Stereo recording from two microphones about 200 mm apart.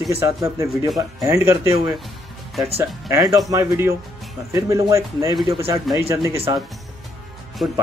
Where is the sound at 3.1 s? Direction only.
15° right (ahead or behind).